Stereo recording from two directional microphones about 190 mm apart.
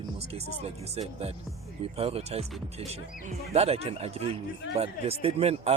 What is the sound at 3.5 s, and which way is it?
Speech, 30° right (ahead or behind).